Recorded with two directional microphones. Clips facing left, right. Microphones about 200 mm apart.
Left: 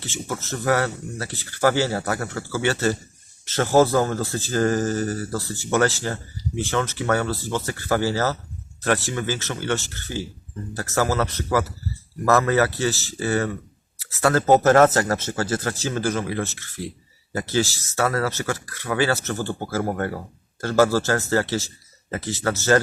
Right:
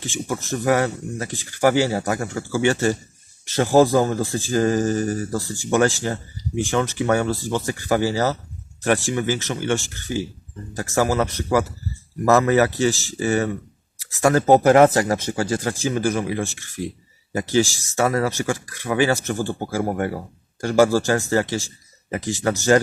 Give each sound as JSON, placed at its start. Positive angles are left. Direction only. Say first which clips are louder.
{"t": 0.0, "sound": "speech", "louder": "right 3 dB", "side_deg": -15}